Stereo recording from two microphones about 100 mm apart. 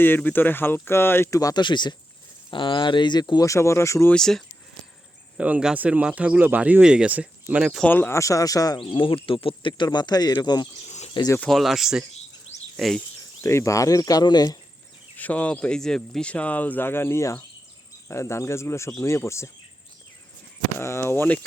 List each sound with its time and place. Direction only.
0.0 s speech: 20° left (ahead or behind)
1.4 s speech: 35° left (ahead or behind)
1.6 s speech: 50° left (ahead or behind); by 4.1 s 30° left (ahead or behind)
4.1 s speech: 5° left (ahead or behind)
5.4 s speech: 10° right (ahead or behind)
7.9 s speech: 20° left (ahead or behind); by 8.8 s 35° left (ahead or behind)
8.8 s speech: 60° left (ahead or behind)
11.3 s speech: centre (ahead or behind)
13.4 s speech: 30° left (ahead or behind)
15.1 s speech: 15° left (ahead or behind)
20.7 s speech: 25° left (ahead or behind)